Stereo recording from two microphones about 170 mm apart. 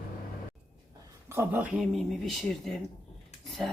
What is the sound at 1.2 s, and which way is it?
Speech, 15° right (ahead or behind).